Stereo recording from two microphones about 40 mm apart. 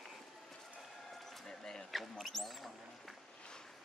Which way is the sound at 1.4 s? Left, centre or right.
Centre.